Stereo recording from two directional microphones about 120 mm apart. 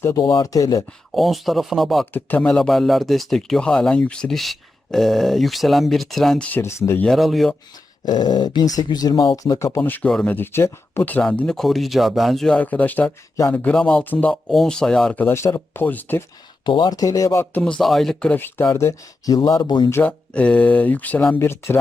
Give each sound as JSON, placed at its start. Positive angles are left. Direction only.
{"t": 0.0, "sound": "speech", "side_deg": 25}
{"t": 1.1, "sound": "speech", "side_deg": 0}
{"t": 2.1, "sound": "speech", "side_deg": 10}
{"t": 6.5, "sound": "speech", "side_deg": 20}
{"t": 7.0, "sound": "speech", "side_deg": 0}
{"t": 8.0, "sound": "speech", "side_deg": 35}
{"t": 10.1, "sound": "speech", "side_deg": 5}
{"t": 10.3, "sound": "speech", "side_deg": 20}
{"t": 15.2, "sound": "speech", "side_deg": 20}
{"t": 16.6, "sound": "speech", "side_deg": 40}
{"t": 17.4, "sound": "speech", "side_deg": 10}
{"t": 19.9, "sound": "speech", "side_deg": 15}
{"t": 21.3, "sound": "speech", "side_deg": 20}